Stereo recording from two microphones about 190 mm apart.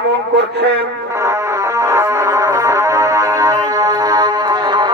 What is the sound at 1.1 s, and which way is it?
Music, 15° right (ahead or behind).